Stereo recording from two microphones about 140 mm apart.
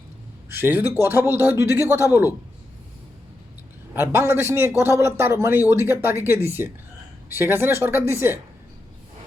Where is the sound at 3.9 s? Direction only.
15° right (ahead or behind).